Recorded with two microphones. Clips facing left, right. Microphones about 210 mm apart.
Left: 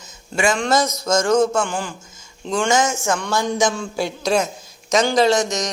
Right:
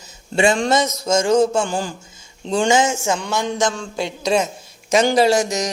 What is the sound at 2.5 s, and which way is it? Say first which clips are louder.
Speech: right 2 dB; 30° right (ahead or behind).